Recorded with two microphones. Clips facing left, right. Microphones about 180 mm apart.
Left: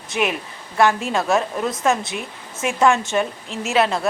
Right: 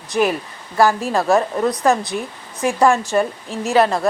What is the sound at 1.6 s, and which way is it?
A woman's voice, centre (ahead or behind).